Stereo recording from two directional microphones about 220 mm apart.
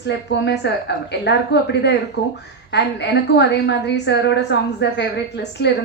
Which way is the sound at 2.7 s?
50° left (ahead or behind).